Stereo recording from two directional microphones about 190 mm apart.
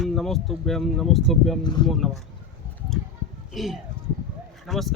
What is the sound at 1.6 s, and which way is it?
Speech, 25° left (ahead or behind).